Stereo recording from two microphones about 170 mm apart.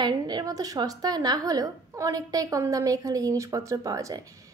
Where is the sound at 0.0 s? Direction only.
25° right (ahead or behind).